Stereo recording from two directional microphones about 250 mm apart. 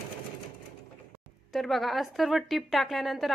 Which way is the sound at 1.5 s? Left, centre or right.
Centre.